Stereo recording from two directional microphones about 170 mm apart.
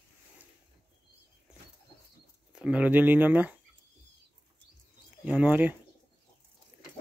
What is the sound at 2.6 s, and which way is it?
Speech, 5° right (ahead or behind).